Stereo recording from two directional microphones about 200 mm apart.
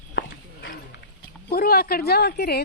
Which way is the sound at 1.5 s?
50° left (ahead or behind).